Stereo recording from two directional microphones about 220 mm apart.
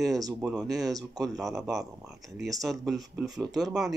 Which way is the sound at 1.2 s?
Centre (ahead or behind).